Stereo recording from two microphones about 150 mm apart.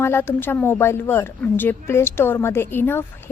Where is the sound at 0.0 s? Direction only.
15° left (ahead or behind).